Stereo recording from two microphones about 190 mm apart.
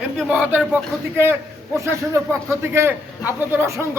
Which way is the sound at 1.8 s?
15° right (ahead or behind).